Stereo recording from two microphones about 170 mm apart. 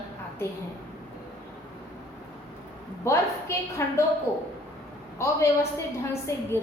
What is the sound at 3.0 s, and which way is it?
A woman's voice, 15° left (ahead or behind).